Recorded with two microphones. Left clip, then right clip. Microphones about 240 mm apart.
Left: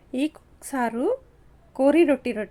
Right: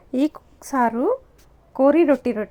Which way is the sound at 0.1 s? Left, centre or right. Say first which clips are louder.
Right 5 dB; centre.